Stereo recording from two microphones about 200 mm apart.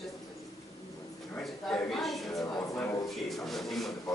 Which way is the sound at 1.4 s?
Centre (ahead or behind).